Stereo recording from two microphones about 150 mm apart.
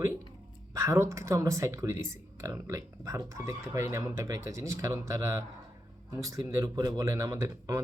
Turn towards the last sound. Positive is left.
turn(degrees=-20)  # may be behind; listen again after turning